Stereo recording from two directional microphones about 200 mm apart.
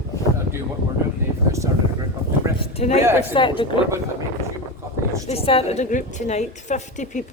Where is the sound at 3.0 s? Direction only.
10° right (ahead or behind).